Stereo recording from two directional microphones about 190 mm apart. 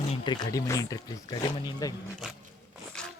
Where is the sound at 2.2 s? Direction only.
Centre (ahead or behind).